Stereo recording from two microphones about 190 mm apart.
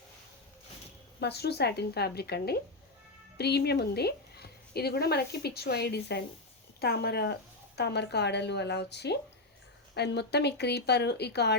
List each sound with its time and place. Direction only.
1.2 s a woman's voice: 60° left (ahead or behind)